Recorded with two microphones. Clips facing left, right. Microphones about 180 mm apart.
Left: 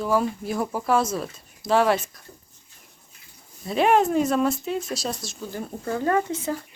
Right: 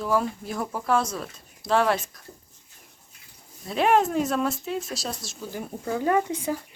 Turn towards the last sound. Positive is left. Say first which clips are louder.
# even
turn(degrees=-15)  # may be behind; listen again after turning